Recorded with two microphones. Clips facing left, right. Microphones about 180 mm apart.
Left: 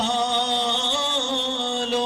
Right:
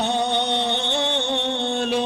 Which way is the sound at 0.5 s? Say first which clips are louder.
Right 2 dB; 60° right (ahead or behind).